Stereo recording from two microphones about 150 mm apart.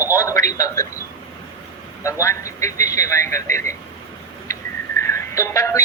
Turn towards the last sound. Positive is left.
turn(degrees=20)  # may be behind; listen again after turning